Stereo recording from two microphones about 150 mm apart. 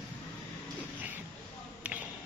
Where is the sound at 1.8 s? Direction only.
10° right (ahead or behind).